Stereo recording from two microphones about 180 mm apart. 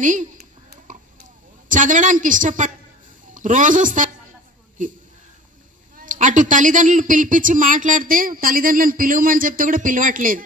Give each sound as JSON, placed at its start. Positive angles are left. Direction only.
{"t": 0.0, "sound": "speech", "side_deg": -45}
{"t": 1.7, "sound": "speech", "side_deg": -45}